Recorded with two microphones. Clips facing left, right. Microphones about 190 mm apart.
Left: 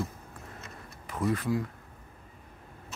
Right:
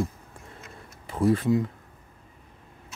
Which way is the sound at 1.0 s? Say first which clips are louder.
Right 7 dB; 30° right (ahead or behind).